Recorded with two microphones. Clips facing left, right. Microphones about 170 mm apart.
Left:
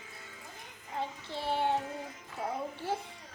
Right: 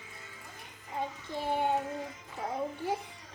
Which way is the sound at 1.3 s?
15° right (ahead or behind).